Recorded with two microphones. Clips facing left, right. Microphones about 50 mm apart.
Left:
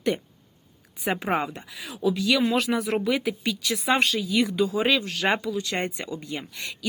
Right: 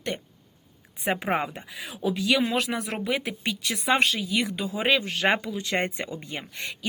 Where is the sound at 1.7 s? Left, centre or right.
Right.